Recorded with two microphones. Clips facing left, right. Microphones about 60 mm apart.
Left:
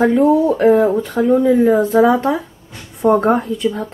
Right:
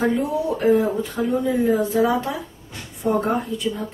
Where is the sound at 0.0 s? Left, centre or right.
Left.